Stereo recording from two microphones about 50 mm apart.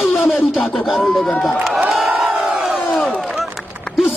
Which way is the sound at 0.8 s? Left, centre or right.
Centre.